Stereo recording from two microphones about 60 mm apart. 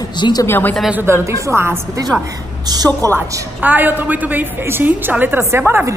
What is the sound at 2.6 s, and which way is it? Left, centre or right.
Speech, right.